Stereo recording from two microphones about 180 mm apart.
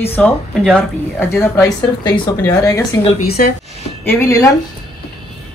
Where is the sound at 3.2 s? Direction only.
60° left (ahead or behind).